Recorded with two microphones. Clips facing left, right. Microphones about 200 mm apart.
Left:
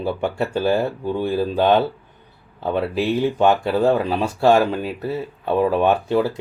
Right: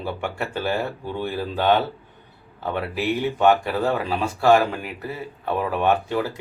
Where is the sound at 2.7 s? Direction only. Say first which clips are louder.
Left 4 dB; 25° left (ahead or behind).